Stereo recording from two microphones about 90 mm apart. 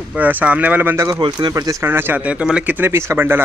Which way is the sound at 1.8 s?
25° right (ahead or behind).